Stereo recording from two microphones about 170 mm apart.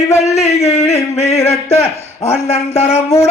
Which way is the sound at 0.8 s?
40° left (ahead or behind).